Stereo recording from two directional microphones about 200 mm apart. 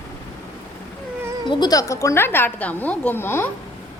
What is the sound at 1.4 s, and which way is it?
A woman's voice, 20° left (ahead or behind).